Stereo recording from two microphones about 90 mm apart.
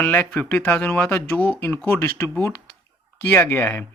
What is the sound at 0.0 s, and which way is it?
Speech, 15° left (ahead or behind).